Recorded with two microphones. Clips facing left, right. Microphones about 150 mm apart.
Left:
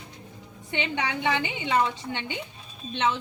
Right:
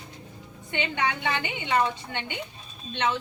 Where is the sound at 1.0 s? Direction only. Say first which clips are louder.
Left 1 dB; 90° left.